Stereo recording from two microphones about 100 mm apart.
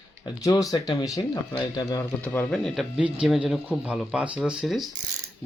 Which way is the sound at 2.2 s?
20° left (ahead or behind).